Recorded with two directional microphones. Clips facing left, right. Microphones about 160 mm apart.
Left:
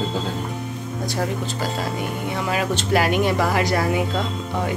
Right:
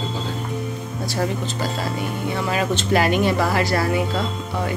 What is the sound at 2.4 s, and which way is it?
A man's voice, 10° left (ahead or behind).